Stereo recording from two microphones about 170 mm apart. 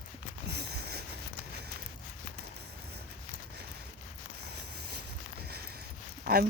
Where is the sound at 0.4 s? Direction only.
75° right (ahead or behind).